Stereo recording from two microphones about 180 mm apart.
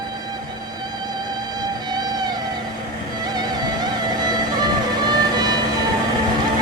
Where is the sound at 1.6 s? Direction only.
20° right (ahead or behind).